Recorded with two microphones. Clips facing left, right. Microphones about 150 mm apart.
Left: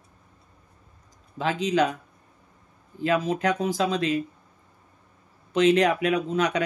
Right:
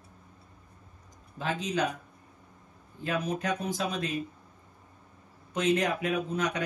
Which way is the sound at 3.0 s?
90° left.